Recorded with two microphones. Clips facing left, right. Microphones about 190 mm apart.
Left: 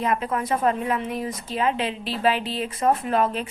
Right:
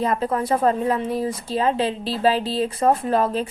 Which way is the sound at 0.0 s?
35° right (ahead or behind).